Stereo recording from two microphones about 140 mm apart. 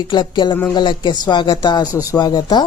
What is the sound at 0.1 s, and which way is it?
Speech, 35° left (ahead or behind).